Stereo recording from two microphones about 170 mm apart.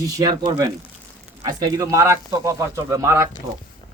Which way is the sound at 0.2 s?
25° right (ahead or behind).